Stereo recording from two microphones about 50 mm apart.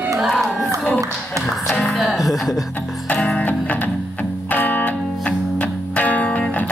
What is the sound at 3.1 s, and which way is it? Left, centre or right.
Music, left.